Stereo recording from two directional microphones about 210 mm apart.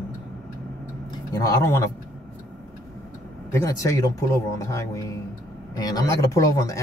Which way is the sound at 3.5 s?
15° left (ahead or behind).